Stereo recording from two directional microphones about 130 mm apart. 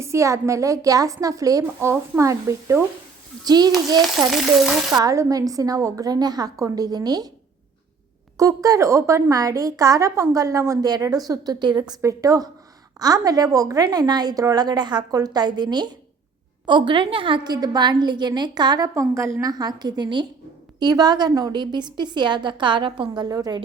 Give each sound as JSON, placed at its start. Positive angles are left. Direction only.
{"t": 0.0, "sound": "a woman's voice", "side_deg": -20}
{"t": 4.3, "sound": "frying", "side_deg": 0}
{"t": 4.9, "sound": "a woman's voice", "side_deg": -25}
{"t": 8.4, "sound": "a woman's voice", "side_deg": -25}